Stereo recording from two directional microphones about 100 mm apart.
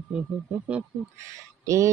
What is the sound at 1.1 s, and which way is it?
Speech, 30° right (ahead or behind).